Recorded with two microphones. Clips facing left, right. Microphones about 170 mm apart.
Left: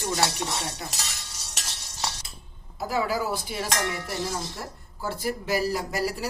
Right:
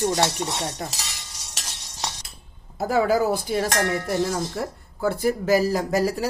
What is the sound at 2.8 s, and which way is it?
A woman's voice, 45° right (ahead or behind).